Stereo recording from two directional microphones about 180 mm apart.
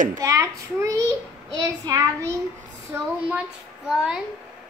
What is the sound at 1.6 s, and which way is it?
A child's voice, 20° right (ahead or behind).